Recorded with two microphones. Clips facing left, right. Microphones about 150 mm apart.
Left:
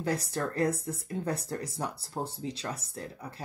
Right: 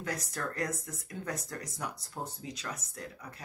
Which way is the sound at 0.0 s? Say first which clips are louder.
Left 6 dB; 30° left (ahead or behind).